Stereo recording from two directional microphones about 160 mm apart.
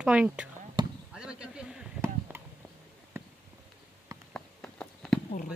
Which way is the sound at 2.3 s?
10° right (ahead or behind).